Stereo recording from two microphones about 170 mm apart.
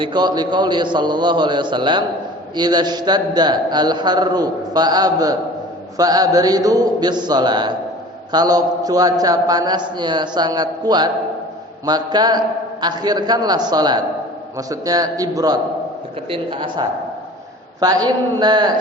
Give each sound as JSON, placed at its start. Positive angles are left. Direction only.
{"t": 0.0, "sound": "a man's voice", "side_deg": -25}